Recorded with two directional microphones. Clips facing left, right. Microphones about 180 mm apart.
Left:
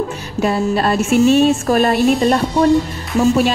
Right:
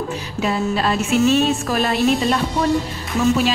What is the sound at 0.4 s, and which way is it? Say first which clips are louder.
A woman's voice: left 4 dB; 45° left (ahead or behind).